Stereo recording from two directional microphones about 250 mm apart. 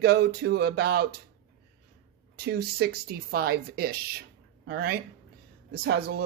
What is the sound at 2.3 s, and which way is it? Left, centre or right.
Speech, right.